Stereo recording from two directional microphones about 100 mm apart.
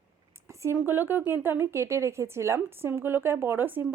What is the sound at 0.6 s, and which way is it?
A woman's voice, 25° right (ahead or behind).